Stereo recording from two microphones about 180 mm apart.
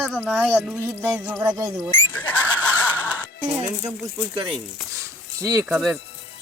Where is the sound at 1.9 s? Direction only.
10° left (ahead or behind).